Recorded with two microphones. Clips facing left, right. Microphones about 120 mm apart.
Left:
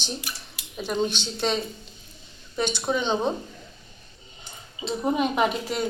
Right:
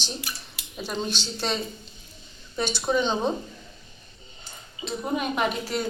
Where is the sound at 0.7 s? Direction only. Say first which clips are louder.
Left 4 dB; 10° left (ahead or behind).